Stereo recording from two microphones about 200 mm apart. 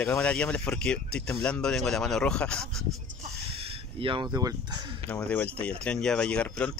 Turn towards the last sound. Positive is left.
turn(degrees=5)  # may be behind; listen again after turning